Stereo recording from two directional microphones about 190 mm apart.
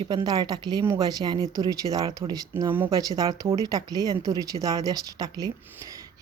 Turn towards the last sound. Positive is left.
turn(degrees=-20)  # may be behind; listen again after turning